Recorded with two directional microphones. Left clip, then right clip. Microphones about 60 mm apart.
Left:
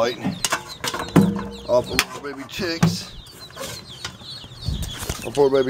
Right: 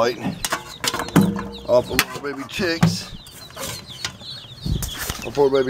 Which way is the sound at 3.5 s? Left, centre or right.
Centre.